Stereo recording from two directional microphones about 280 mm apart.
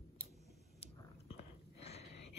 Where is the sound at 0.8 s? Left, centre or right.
Left.